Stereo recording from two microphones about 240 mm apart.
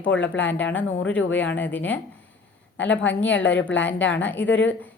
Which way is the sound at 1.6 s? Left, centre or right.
Centre.